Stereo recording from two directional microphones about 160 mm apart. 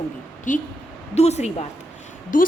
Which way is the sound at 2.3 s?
55° left (ahead or behind).